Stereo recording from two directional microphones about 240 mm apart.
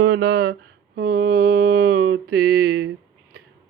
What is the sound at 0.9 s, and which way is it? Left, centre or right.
Mantra, right.